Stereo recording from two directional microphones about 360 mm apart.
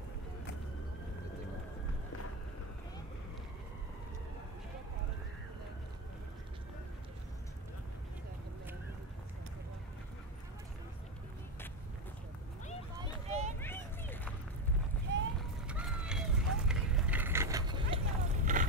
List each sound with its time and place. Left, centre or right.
13.3 s a sound: centre
13.6 s vehicle: centre
15.6 s run: centre; by 18.7 s right